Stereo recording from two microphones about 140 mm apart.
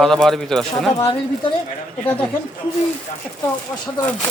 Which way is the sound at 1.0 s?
40° left (ahead or behind).